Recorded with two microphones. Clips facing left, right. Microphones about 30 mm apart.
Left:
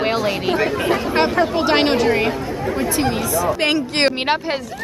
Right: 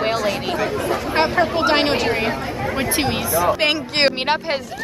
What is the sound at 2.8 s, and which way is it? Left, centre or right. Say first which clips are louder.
Speech: left 1 dB; right.